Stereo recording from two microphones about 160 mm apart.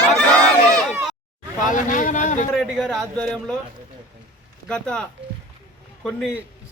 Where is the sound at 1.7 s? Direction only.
55° left (ahead or behind).